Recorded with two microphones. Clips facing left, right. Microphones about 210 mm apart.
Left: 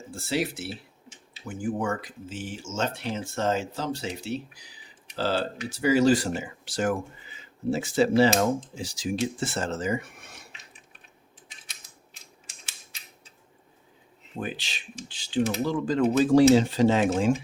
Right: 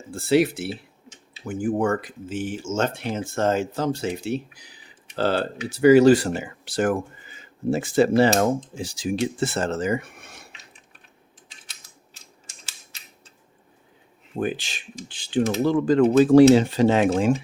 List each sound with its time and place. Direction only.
0.1 s speech: 60° right (ahead or behind)
14.3 s speech: 50° right (ahead or behind)